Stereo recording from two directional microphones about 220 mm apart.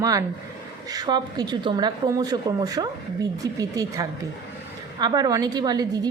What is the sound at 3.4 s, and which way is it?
Speech, 15° right (ahead or behind).